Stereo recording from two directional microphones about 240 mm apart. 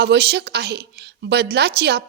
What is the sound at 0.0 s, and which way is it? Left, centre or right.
A woman's voice, right.